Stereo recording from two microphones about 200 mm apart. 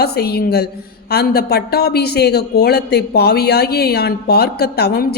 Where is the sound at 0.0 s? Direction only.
50° left (ahead or behind).